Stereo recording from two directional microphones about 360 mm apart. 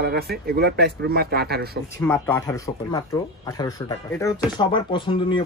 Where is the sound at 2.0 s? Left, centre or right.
Centre.